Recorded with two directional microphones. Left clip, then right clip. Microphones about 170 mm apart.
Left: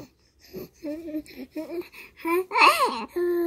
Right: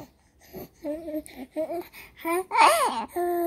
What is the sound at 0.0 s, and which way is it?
Babbling, 20° right (ahead or behind).